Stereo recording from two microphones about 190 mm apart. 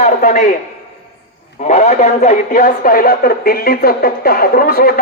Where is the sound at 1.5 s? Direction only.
40° left (ahead or behind).